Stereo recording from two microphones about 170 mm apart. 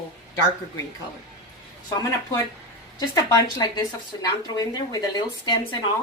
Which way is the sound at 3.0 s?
20° left (ahead or behind).